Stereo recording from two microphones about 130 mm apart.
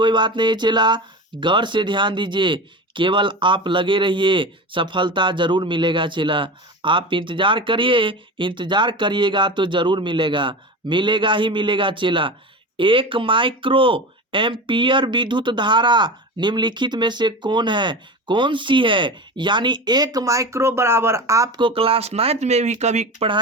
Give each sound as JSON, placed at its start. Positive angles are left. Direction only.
{"t": 0.0, "sound": "speech", "side_deg": -35}
{"t": 21.6, "sound": "speech", "side_deg": -45}